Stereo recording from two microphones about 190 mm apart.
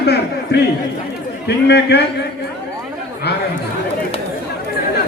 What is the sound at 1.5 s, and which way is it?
Speech, 60° left (ahead or behind).